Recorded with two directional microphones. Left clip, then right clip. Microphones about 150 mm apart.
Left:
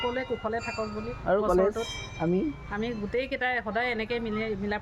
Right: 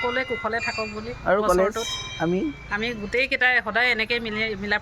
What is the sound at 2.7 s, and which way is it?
Speech, 5° left (ahead or behind).